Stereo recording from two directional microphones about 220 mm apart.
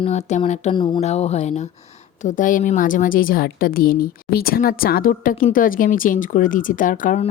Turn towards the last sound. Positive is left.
turn(degrees=35)  # may be behind; listen again after turning